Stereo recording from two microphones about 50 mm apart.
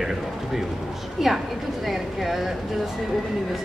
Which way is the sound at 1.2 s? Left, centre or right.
Centre.